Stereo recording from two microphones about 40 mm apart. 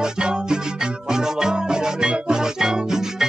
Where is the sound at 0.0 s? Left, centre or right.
Right.